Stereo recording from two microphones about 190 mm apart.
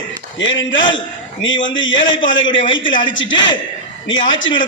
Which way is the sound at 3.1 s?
80° left.